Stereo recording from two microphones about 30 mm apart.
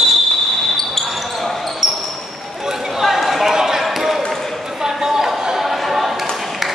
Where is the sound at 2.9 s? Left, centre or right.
Centre.